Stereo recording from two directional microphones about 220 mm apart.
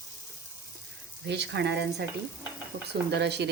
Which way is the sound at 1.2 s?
50° right (ahead or behind).